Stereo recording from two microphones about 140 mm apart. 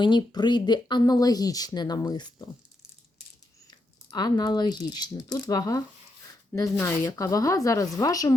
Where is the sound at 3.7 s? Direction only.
30° left (ahead or behind).